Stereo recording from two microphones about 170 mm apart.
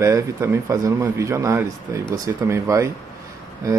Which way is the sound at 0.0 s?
15° right (ahead or behind).